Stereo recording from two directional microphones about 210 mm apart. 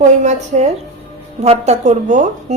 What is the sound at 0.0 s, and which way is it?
A woman's voice, 35° right (ahead or behind).